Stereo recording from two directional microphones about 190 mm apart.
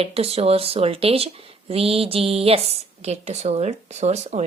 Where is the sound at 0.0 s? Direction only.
30° right (ahead or behind).